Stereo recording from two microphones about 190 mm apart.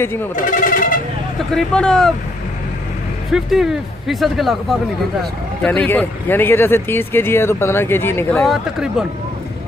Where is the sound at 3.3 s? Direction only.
Centre (ahead or behind).